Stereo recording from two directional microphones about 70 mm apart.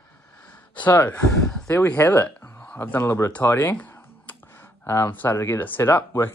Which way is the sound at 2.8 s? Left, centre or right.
Left.